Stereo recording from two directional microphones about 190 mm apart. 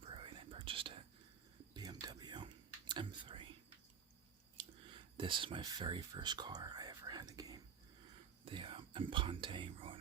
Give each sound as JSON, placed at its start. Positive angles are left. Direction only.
{"t": 0.0, "sound": "whispering", "side_deg": -25}
{"t": 4.5, "sound": "a sound", "side_deg": -25}
{"t": 8.4, "sound": "whispering", "side_deg": -30}